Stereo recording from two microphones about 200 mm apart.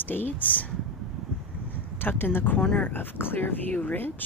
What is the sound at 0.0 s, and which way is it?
Speech, 10° left (ahead or behind).